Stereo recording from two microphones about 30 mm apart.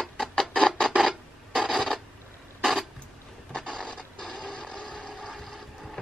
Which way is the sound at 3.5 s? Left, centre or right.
Left.